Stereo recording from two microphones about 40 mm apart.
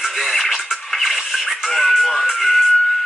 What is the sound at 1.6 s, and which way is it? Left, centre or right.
Speech, centre.